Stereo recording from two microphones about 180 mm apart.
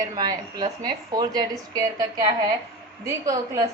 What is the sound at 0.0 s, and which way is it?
A woman's voice, 20° right (ahead or behind).